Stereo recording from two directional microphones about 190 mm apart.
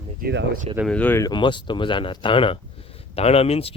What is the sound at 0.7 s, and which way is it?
Speech, 5° left (ahead or behind).